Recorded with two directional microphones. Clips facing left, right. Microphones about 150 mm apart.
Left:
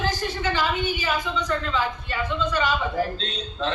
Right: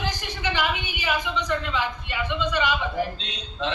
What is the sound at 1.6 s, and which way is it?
Speech, 40° left (ahead or behind).